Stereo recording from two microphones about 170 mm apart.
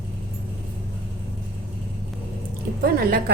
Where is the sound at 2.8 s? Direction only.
60° right (ahead or behind).